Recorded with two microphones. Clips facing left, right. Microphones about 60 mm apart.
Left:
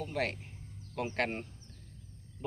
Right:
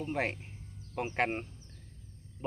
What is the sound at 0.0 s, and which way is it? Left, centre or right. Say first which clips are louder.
Speech: right 1 dB; right.